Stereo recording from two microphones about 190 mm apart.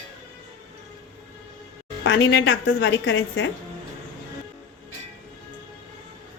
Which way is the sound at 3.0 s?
90° left.